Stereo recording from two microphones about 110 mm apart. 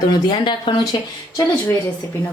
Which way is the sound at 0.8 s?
35° left (ahead or behind).